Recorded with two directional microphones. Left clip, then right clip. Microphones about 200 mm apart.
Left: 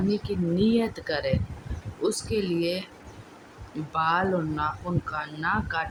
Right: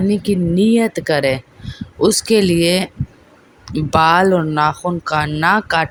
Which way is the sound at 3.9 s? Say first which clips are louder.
Right 13 dB; 45° right (ahead or behind).